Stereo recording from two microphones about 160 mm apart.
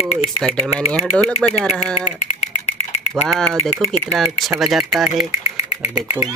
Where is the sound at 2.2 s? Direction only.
45° left (ahead or behind).